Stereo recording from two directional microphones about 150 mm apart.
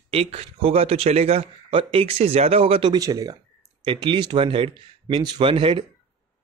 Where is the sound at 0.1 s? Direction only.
40° right (ahead or behind); by 3.3 s 25° right (ahead or behind).